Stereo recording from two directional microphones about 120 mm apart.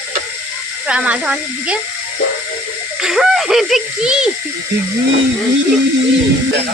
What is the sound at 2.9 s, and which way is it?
A child's voice, 5° right (ahead or behind).